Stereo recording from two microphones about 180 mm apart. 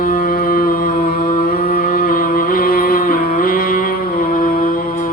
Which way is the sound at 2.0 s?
50° left (ahead or behind).